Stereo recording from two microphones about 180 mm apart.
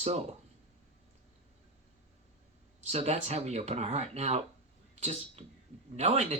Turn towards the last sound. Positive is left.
turn(degrees=-35)  # may be behind; listen again after turning